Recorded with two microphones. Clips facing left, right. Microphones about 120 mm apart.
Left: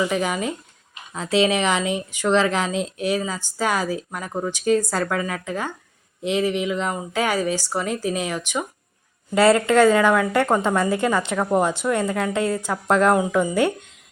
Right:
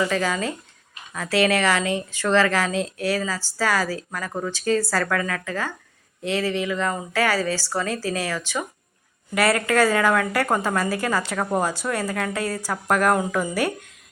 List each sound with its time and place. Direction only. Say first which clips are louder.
0.0 s a woman's voice: left 1 dB; 15° left (ahead or behind)